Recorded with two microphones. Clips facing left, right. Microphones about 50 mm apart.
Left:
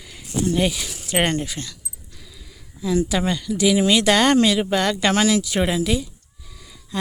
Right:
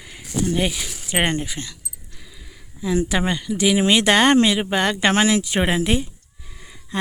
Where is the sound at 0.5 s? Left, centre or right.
Centre.